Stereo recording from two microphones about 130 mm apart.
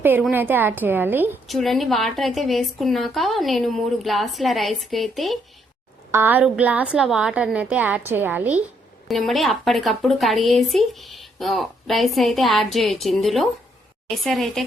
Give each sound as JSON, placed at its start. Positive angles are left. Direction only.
{"t": 0.0, "sound": "a woman's voice", "side_deg": -15}
{"t": 1.5, "sound": "speech", "side_deg": 0}
{"t": 6.1, "sound": "a woman's voice", "side_deg": -15}
{"t": 9.0, "sound": "speech", "side_deg": 0}